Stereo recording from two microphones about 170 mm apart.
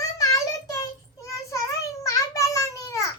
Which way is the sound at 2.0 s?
20° left (ahead or behind).